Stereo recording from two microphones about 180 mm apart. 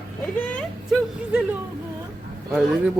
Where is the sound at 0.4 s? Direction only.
5° left (ahead or behind).